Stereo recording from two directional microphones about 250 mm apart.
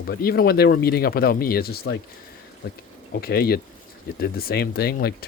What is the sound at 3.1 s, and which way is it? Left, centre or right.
Speech, left.